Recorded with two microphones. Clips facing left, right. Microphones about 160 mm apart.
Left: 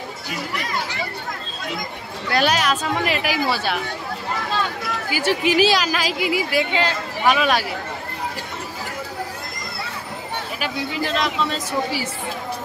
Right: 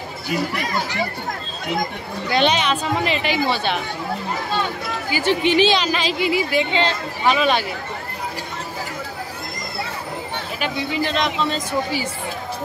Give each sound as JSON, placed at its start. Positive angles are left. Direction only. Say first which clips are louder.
{"t": 2.3, "sound": "a woman's voice", "louder": "right 1 dB", "side_deg": 5}
{"t": 5.1, "sound": "a woman's voice", "louder": "right 1 dB", "side_deg": 5}
{"t": 10.6, "sound": "a woman's voice", "louder": "right 3 dB", "side_deg": 5}